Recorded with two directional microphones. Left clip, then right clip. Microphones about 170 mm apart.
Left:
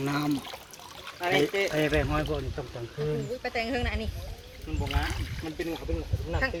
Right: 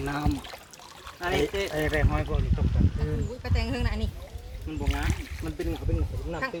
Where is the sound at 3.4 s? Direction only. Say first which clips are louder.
Left 3 dB; 60° right (ahead or behind).